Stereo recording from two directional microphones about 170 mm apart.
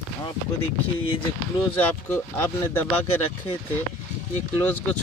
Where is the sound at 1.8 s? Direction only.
10° left (ahead or behind).